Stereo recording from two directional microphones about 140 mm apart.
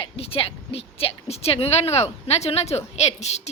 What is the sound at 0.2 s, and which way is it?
A woman's voice, 45° left (ahead or behind).